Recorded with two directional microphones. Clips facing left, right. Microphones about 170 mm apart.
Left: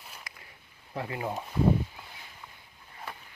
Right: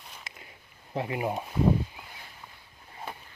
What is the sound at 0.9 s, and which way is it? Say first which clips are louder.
Speech: right 4 dB; 20° right (ahead or behind).